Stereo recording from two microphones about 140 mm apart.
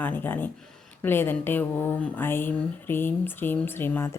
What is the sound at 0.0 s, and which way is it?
Speech, 10° left (ahead or behind).